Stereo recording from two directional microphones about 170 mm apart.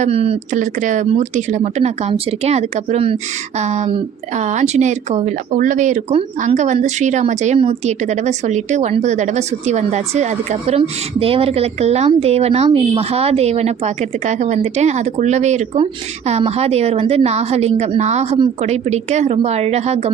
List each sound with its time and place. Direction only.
0.0 s a woman's voice: 35° right (ahead or behind)
0.5 s a woman's voice: 50° right (ahead or behind)